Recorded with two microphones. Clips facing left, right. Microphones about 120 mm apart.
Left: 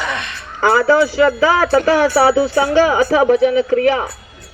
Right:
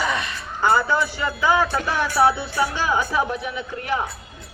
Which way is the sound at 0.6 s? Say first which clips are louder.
Left 7 dB; 90° left.